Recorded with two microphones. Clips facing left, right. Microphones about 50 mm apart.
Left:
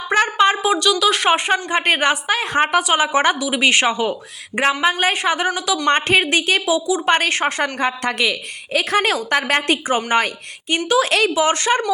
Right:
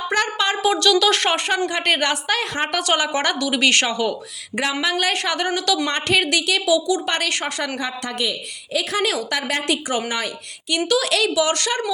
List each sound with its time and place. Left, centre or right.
0.1 s a sound: left
0.7 s a woman's voice: centre
1.3 s speech: left
2.5 s a woman's voice: left
5.1 s a woman's voice: centre
5.9 s a woman's voice: left
7.8 s a woman's voice: left
8.2 s a woman's voice: left
8.8 s a woman's voice: left
10.8 s speech: left
11.1 s a woman's voice: left